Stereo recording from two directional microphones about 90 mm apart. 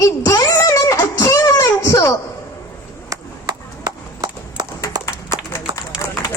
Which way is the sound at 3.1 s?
40° right (ahead or behind).